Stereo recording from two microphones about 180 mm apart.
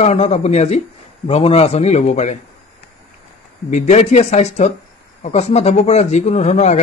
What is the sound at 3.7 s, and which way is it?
Speech, 40° left (ahead or behind).